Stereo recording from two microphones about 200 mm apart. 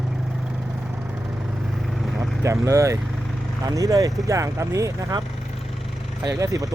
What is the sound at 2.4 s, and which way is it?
Speech, 15° right (ahead or behind).